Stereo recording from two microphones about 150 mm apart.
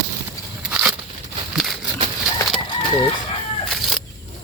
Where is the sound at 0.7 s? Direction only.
10° right (ahead or behind).